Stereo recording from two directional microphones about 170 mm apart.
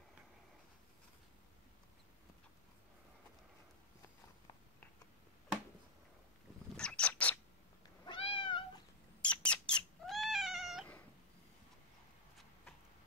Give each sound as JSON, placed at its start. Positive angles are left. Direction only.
{"t": 6.8, "sound": "bird", "side_deg": 5}
{"t": 8.0, "sound": "cat", "side_deg": 30}
{"t": 9.2, "sound": "cat", "side_deg": 5}